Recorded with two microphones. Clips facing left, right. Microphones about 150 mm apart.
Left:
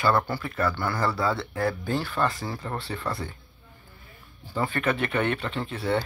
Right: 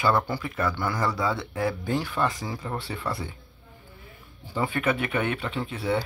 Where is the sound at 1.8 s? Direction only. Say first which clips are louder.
Even; 15° right (ahead or behind).